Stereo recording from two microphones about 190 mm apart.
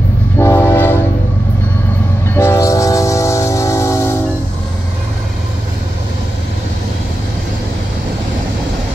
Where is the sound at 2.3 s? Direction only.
15° left (ahead or behind).